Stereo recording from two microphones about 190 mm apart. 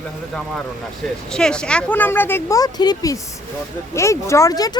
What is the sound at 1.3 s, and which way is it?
Speech, 5° left (ahead or behind).